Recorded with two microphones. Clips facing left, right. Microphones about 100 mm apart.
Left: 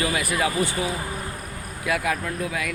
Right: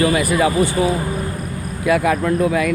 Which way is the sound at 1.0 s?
15° right (ahead or behind).